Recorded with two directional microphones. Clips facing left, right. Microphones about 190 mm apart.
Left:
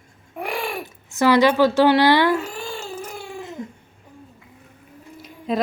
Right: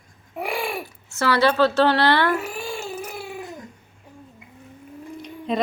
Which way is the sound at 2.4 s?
10° right (ahead or behind).